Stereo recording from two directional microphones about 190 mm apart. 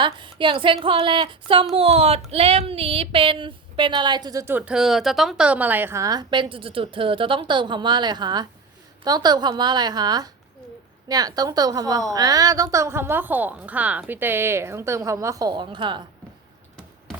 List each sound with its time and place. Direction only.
0.0 s a woman's voice: 25° right (ahead or behind)